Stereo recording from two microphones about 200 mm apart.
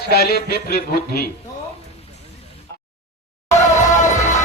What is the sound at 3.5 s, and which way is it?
Music, 35° left (ahead or behind).